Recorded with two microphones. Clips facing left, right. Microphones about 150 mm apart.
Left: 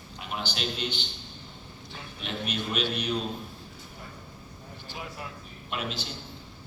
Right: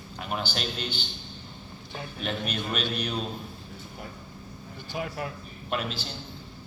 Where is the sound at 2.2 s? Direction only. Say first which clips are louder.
Right 1 dB; 45° right (ahead or behind).